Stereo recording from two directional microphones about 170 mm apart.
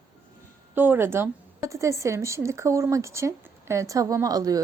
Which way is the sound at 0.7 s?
10° right (ahead or behind).